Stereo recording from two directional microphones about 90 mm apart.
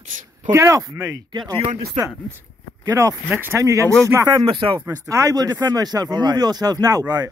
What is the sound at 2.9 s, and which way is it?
Speech, 40° right (ahead or behind).